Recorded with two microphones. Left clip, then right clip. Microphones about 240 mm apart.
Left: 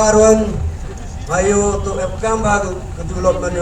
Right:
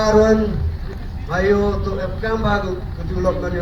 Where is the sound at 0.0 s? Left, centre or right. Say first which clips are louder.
Left 4 dB; left.